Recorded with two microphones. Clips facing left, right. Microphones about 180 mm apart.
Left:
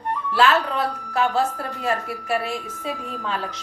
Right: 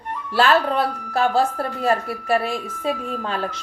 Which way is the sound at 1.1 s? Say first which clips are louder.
Right 2 dB; 35° right (ahead or behind).